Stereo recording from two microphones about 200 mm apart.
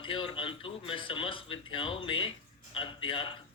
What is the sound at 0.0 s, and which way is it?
Speech, 25° left (ahead or behind).